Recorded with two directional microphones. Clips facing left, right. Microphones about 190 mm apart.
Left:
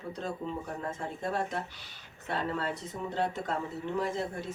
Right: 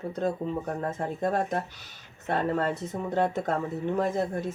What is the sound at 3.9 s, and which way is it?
Speech, 50° right (ahead or behind).